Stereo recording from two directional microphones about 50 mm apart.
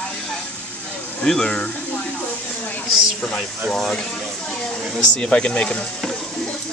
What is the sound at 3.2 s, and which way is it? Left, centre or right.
Speech, centre.